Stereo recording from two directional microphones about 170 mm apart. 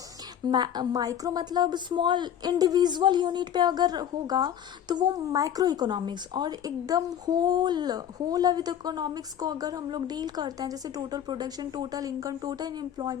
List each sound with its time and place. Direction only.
0.4 s a woman's voice: 25° right (ahead or behind)